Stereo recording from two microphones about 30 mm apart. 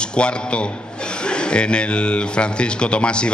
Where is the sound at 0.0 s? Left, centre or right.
Left.